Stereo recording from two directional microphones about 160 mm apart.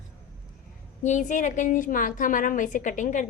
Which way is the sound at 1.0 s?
50° left (ahead or behind).